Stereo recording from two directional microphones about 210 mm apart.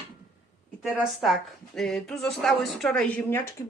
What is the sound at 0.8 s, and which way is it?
Speech, centre (ahead or behind).